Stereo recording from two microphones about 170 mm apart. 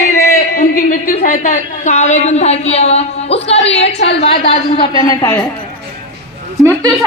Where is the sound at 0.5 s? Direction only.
60° left (ahead or behind); by 5.4 s 20° left (ahead or behind).